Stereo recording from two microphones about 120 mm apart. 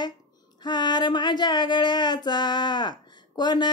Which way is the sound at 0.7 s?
40° left (ahead or behind).